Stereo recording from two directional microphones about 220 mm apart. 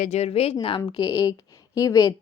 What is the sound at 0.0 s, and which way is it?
A woman's voice, 30° left (ahead or behind).